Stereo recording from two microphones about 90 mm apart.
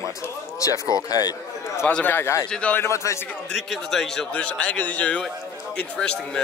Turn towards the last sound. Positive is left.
turn(degrees=10)  # may be behind; listen again after turning